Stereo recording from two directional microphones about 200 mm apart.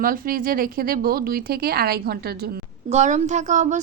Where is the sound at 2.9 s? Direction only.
35° right (ahead or behind).